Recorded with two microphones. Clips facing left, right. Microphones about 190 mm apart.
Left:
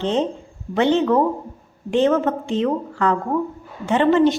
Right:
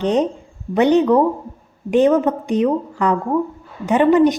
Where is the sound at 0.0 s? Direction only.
15° right (ahead or behind).